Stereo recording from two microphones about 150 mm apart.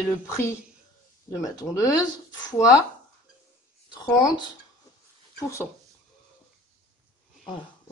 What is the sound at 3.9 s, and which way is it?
Speech, 30° left (ahead or behind).